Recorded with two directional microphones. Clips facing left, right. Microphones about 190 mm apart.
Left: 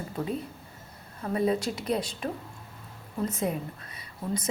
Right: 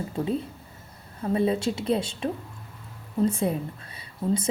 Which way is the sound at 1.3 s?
25° right (ahead or behind).